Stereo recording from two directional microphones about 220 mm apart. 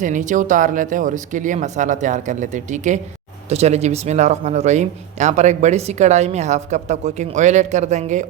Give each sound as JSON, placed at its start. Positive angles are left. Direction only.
{"t": 0.0, "sound": "speech", "side_deg": -35}